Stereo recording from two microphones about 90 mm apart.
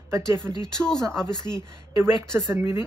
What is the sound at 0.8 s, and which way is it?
Speech, 5° left (ahead or behind).